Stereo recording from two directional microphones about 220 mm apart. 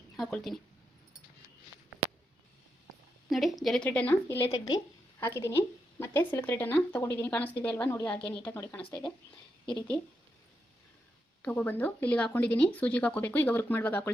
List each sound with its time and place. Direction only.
0.2 s speech: centre (ahead or behind)
3.2 s a woman's voice: centre (ahead or behind)
11.4 s speech: 5° left (ahead or behind)